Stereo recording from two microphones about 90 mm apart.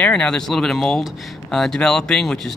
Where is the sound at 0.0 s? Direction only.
15° left (ahead or behind).